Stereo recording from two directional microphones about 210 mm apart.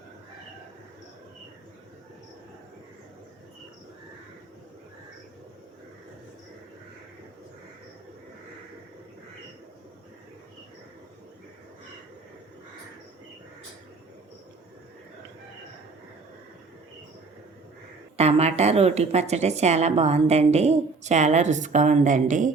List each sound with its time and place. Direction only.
18.2 s a woman's voice: 30° right (ahead or behind)